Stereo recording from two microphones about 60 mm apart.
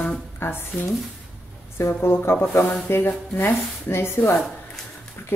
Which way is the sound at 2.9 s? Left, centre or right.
Left.